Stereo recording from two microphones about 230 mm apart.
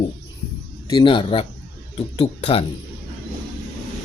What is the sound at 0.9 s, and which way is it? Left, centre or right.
Speech, left.